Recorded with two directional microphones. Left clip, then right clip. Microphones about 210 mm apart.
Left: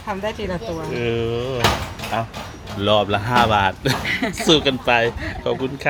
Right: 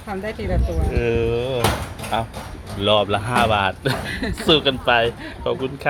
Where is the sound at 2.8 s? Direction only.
15° left (ahead or behind).